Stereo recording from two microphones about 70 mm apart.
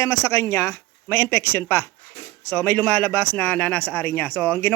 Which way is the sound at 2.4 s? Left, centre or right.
Left.